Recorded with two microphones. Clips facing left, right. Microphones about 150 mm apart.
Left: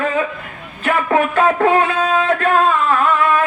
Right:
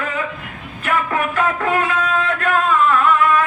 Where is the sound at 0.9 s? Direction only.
30° left (ahead or behind).